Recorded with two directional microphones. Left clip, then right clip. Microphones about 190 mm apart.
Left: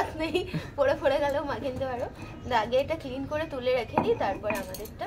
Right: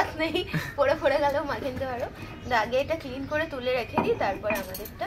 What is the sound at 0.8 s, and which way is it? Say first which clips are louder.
A woman's voice: right 1 dB; 30° left (ahead or behind).